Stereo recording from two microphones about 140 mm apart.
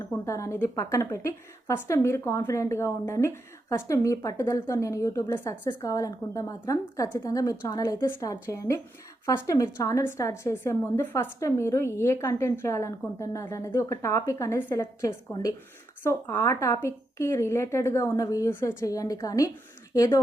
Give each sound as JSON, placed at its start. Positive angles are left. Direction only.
{"t": 0.1, "sound": "a woman's voice", "side_deg": 20}